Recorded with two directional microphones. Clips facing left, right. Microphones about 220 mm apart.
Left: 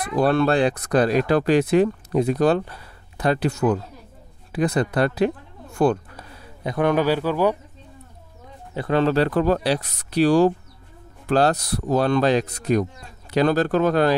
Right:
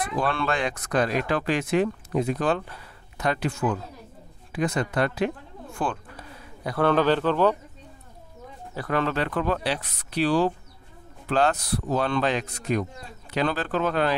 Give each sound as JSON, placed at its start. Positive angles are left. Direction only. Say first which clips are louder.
{"t": 0.2, "sound": "speech", "louder": "left 9 dB", "side_deg": 40}
{"t": 6.6, "sound": "a man's voice", "louder": "left 2 dB", "side_deg": 20}
{"t": 8.7, "sound": "speech", "louder": "left 7 dB", "side_deg": 25}